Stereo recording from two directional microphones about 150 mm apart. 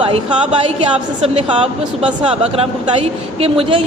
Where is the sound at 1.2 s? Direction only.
35° right (ahead or behind).